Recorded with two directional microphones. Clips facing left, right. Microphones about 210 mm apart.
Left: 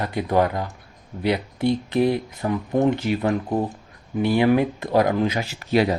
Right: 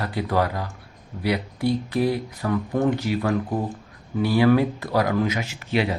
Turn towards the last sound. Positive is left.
turn(degrees=40)  # may be behind; listen again after turning